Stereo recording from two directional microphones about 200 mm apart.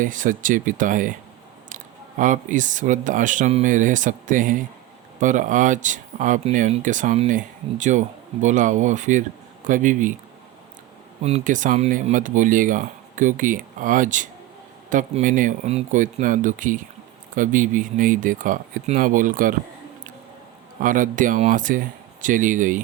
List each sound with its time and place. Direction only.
0.0 s speech: 40° right (ahead or behind)
11.2 s speech: 30° right (ahead or behind)
20.8 s speech: 40° right (ahead or behind)